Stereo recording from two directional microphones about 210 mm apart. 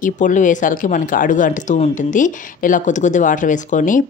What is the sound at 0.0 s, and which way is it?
Speech, 35° left (ahead or behind).